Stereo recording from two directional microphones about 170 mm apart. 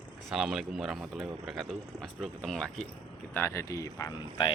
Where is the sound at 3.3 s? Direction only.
15° left (ahead or behind).